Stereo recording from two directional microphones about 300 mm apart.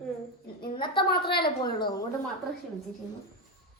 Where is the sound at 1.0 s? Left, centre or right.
Left.